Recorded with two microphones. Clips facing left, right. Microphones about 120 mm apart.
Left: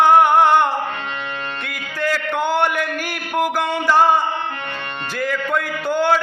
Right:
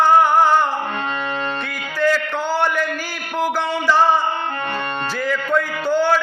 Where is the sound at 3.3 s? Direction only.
55° left (ahead or behind).